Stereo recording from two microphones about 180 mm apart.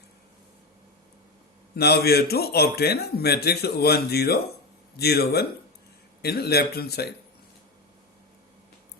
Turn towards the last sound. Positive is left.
turn(degrees=60)  # may be behind; listen again after turning